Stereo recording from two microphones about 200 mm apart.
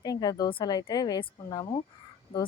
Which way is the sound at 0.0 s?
20° left (ahead or behind).